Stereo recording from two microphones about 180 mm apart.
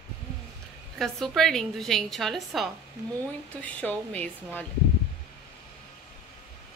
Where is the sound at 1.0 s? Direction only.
Centre (ahead or behind).